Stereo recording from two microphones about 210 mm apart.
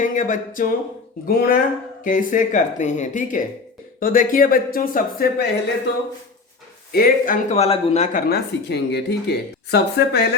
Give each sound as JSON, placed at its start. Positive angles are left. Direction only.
{"t": 0.0, "sound": "speech", "side_deg": 40}
{"t": 6.9, "sound": "speech", "side_deg": 35}
{"t": 8.3, "sound": "speech", "side_deg": 50}